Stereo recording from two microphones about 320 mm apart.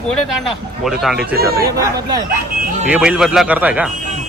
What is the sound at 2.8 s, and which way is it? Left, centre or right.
Speech, centre.